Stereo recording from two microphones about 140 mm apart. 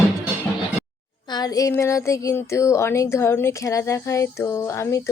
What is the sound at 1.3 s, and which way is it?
Speech, 30° left (ahead or behind).